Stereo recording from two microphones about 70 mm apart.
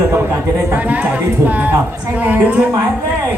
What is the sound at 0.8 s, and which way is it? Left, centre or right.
Speech, right.